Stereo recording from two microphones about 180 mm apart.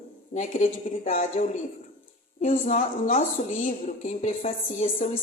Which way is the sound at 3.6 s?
35° left (ahead or behind).